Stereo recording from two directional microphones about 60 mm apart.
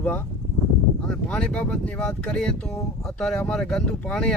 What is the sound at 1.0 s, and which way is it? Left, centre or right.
Speech, centre.